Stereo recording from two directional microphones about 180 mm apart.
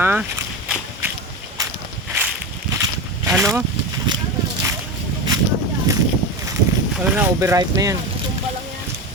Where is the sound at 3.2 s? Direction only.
15° right (ahead or behind).